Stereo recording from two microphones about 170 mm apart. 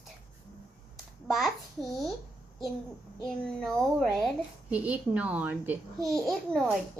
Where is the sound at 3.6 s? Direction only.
Centre (ahead or behind).